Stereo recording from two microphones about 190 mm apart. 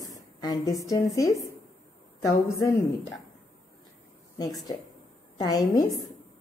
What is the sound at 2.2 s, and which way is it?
Speech, 15° left (ahead or behind).